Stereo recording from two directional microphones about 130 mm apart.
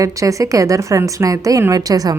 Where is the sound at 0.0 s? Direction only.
25° right (ahead or behind).